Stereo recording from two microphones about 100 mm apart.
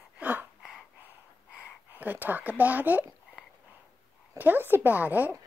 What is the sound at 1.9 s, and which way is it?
A woman's voice, 15° right (ahead or behind).